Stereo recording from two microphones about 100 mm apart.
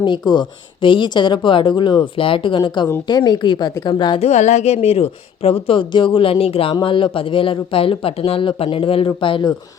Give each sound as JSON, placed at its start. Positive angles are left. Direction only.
{"t": 0.0, "sound": "speech", "side_deg": 45}
{"t": 4.2, "sound": "a woman's voice", "side_deg": 90}
{"t": 6.8, "sound": "speech", "side_deg": 60}